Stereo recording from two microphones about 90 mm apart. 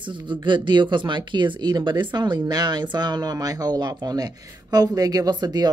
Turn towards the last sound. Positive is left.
turn(degrees=-50)  # may be behind; listen again after turning